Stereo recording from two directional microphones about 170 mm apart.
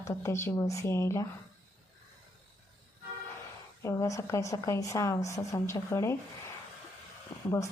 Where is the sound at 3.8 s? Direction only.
20° left (ahead or behind).